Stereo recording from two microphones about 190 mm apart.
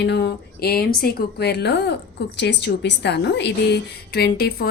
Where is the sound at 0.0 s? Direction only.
60° left (ahead or behind).